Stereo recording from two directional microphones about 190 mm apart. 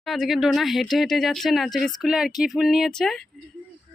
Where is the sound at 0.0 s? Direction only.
Centre (ahead or behind).